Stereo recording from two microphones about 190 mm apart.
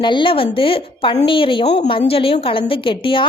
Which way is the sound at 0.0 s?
25° left (ahead or behind).